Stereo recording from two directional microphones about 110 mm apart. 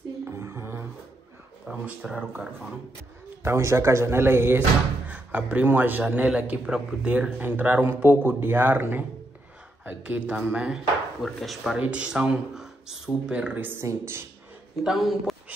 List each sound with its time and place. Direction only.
0.4 s a sound: 25° right (ahead or behind)
1.9 s speech: 10° right (ahead or behind)
3.4 s speech: 25° right (ahead or behind)
14.8 s speech: 5° right (ahead or behind)